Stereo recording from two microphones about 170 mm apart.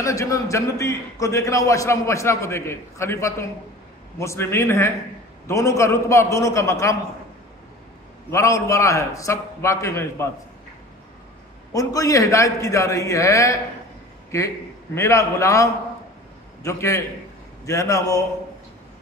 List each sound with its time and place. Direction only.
0.0 s a man's voice: 20° left (ahead or behind)
8.3 s a man's voice: 15° left (ahead or behind)
11.7 s a man's voice: 20° left (ahead or behind)
15.0 s a man's voice: 15° left (ahead or behind)